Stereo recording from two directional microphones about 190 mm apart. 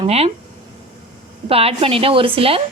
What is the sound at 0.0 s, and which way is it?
Speech, 35° right (ahead or behind).